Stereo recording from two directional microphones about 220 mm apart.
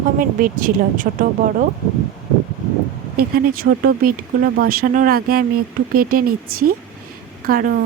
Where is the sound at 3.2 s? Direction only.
45° right (ahead or behind).